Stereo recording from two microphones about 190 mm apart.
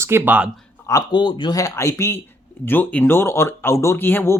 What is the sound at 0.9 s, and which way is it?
Speech, 20° left (ahead or behind).